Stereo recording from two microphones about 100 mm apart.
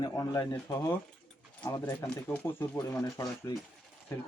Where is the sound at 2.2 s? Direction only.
20° left (ahead or behind).